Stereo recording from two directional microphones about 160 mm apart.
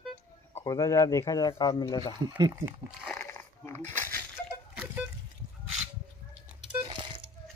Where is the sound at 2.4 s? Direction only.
25° right (ahead or behind).